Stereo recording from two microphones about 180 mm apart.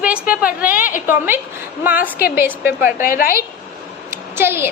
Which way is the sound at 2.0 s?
60° left (ahead or behind).